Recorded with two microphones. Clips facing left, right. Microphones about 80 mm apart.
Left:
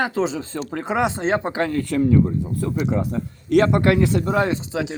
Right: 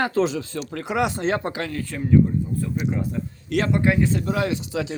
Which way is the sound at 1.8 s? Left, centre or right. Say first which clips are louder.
Even; left.